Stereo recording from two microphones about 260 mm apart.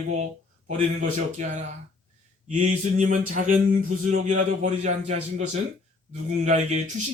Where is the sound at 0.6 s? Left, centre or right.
Right.